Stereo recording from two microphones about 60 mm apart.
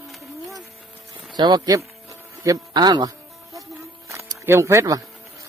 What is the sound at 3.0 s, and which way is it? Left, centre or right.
Music, right.